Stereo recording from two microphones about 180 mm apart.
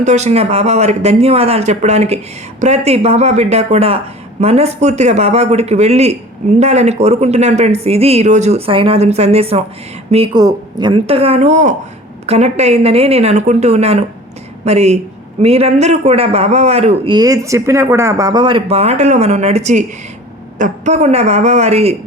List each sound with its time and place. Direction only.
0.0 s speech: 40° right (ahead or behind)
10.3 s speech: 25° right (ahead or behind)